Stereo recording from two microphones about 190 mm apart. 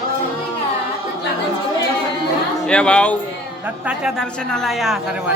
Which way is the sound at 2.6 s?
5° left (ahead or behind).